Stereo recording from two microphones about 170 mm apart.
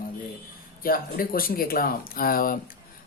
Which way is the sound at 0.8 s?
60° left (ahead or behind).